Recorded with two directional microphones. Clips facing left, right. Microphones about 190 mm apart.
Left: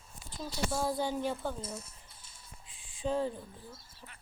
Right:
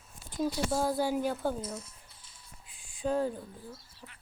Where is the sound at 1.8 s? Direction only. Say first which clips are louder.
Even; 45° left (ahead or behind).